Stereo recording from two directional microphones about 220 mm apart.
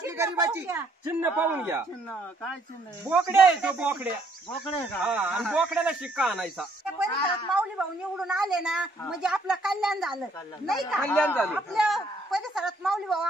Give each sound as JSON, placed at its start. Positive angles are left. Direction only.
{"t": 0.0, "sound": "a man's voice", "side_deg": -10}
{"t": 3.1, "sound": "speech", "side_deg": -5}